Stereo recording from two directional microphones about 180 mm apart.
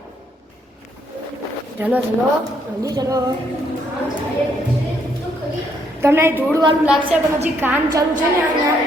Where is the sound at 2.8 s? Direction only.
20° right (ahead or behind).